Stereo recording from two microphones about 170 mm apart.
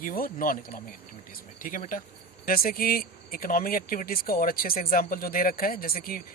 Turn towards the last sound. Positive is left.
turn(degrees=60)  # may be behind; listen again after turning